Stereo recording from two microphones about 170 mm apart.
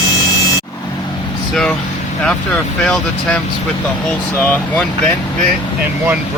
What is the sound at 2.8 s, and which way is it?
Speech, 5° left (ahead or behind).